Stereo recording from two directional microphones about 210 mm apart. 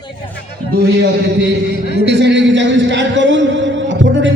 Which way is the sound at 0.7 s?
55° right (ahead or behind).